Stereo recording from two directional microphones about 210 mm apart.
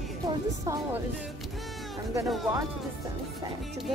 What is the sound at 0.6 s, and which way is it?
Speech, 15° right (ahead or behind).